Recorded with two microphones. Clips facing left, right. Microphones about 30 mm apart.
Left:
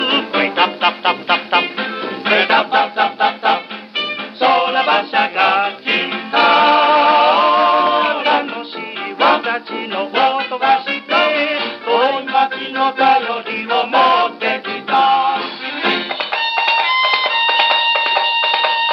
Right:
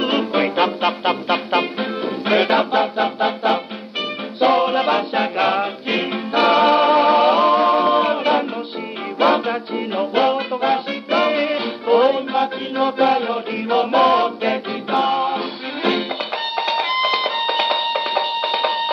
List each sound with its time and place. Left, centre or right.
0.0 s music: left